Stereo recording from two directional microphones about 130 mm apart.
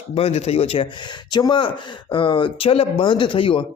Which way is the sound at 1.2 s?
35° left (ahead or behind).